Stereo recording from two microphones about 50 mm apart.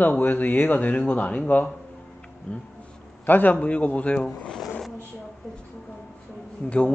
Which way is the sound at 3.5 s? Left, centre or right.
Left.